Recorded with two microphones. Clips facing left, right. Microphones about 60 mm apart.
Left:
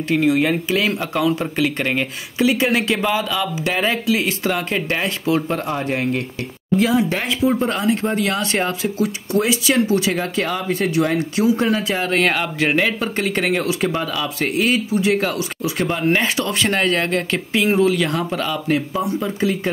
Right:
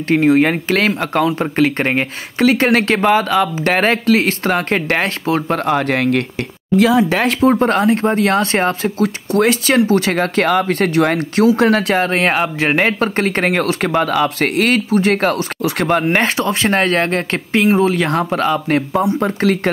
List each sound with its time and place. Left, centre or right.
0.1 s speech: right
5.5 s speech: right
6.8 s speech: right
9.0 s speech: right
11.5 s speech: right
12.0 s speech: right
12.7 s speech: right
16.3 s speech: right